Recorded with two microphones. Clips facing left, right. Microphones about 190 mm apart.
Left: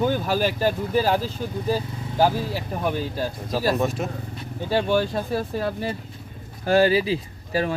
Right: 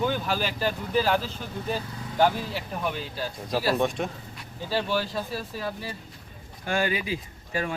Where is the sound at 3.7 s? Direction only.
5° left (ahead or behind).